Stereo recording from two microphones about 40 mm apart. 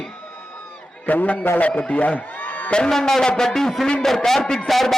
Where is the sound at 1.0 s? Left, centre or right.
Left.